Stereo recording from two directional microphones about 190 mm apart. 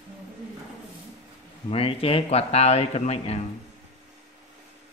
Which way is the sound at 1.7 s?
30° left (ahead or behind).